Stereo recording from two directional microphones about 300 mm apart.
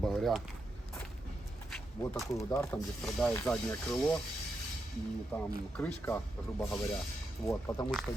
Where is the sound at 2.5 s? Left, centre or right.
Centre.